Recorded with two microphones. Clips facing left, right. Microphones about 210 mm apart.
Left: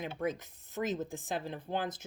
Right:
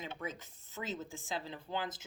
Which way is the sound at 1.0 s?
50° left (ahead or behind).